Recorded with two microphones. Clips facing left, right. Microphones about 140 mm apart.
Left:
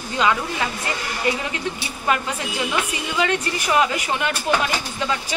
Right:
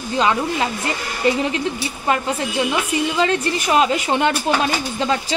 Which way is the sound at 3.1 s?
25° right (ahead or behind).